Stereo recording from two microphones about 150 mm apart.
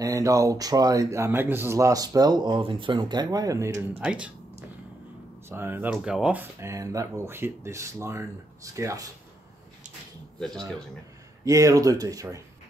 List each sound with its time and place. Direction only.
0.0 s speech: 20° right (ahead or behind)
4.0 s speech: 10° right (ahead or behind)
5.5 s speech: 15° right (ahead or behind)
11.4 s speech: 20° right (ahead or behind)